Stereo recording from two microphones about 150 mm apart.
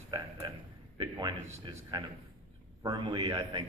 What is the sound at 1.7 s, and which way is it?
A man's voice, 30° right (ahead or behind).